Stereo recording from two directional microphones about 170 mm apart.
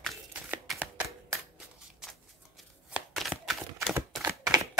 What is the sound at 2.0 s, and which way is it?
Shuffling cards, centre (ahead or behind).